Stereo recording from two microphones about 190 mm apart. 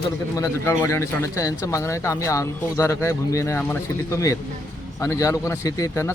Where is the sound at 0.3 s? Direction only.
15° left (ahead or behind).